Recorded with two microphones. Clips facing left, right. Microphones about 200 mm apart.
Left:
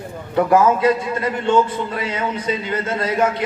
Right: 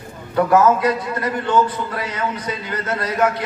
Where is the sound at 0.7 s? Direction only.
25° left (ahead or behind).